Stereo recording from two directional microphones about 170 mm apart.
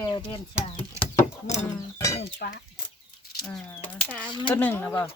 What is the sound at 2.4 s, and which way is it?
Speech, 60° left (ahead or behind).